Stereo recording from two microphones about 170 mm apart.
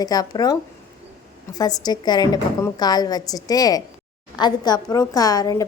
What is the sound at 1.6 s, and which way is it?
A woman's voice, 25° left (ahead or behind).